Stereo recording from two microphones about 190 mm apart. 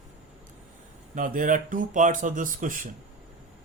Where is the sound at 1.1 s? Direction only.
45° right (ahead or behind).